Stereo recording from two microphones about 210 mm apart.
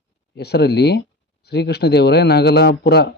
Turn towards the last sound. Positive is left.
turn(degrees=55)  # may be behind; listen again after turning